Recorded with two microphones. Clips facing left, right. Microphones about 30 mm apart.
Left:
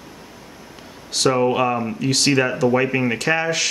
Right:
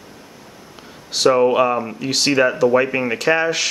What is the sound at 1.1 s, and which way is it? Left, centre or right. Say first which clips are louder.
Speech: right 3 dB; centre.